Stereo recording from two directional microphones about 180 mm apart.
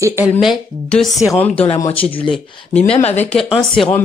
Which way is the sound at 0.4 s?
Centre (ahead or behind).